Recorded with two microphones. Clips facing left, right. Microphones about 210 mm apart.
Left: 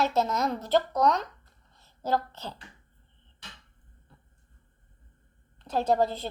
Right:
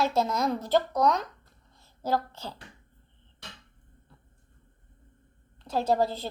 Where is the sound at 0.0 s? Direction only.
10° right (ahead or behind).